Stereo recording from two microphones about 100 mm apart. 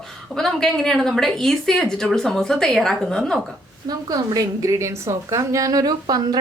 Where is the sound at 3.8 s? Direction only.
40° right (ahead or behind).